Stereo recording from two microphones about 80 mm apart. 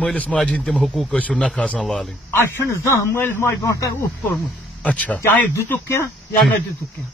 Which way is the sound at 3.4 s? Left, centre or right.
Left.